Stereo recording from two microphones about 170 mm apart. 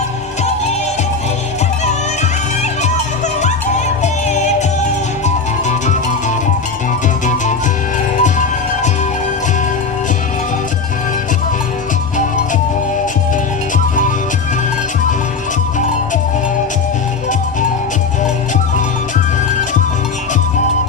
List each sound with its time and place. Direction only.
4.0 s music: 45° left (ahead or behind)
8.2 s music: 45° left (ahead or behind)